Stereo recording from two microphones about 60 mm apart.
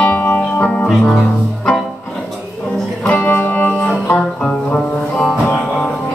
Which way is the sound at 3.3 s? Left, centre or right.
Left.